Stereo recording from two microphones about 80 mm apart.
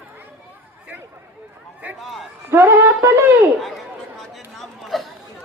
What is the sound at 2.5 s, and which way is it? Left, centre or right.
Speech, right.